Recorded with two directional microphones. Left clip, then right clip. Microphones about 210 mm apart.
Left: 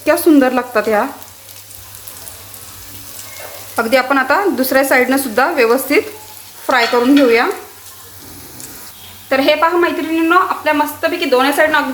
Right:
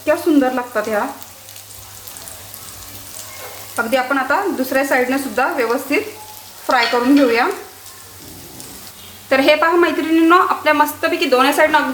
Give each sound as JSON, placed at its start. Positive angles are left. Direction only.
{"t": 0.0, "sound": "speech", "side_deg": 30}
{"t": 3.8, "sound": "speech", "side_deg": 30}
{"t": 9.3, "sound": "a woman's voice", "side_deg": -5}